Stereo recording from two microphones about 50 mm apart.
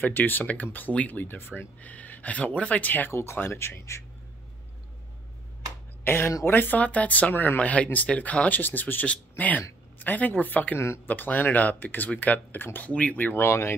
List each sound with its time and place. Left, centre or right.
0.0 s speech: left
1.8 s speech: left
3.1 s speech: left
6.0 s speech: left
6.8 s speech: left
12.8 s speech: left
13.4 s speech: left